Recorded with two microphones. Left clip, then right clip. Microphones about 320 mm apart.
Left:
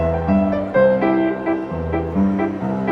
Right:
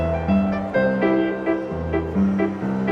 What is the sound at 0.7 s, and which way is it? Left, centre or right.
Music, centre.